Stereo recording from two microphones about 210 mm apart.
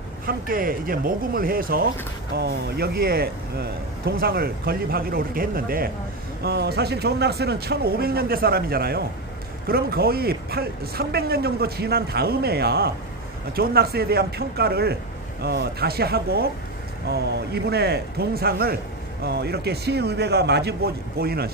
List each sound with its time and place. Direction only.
0.3 s speech: 40° right (ahead or behind)